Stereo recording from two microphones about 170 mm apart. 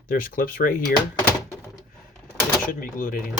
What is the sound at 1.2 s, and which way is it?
Thunk, 15° left (ahead or behind).